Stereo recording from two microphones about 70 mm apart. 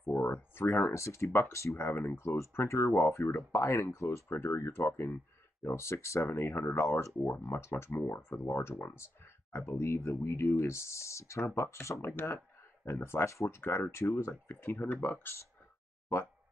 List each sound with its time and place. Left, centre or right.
0.0 s speech: left
7.2 s speech: left
13.6 s speech: left